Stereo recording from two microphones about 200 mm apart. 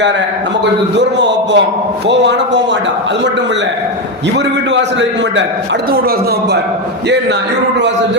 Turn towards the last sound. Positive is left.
turn(degrees=-50)  # may be behind; listen again after turning